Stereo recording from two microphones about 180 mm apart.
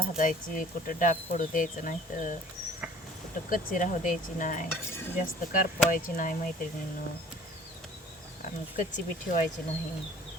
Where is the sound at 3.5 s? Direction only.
50° left (ahead or behind).